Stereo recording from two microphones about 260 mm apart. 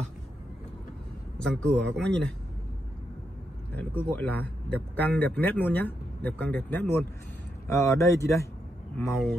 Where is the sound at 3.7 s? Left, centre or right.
Centre.